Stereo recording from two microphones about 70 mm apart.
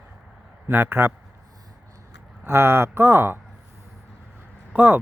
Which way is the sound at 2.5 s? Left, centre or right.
Right.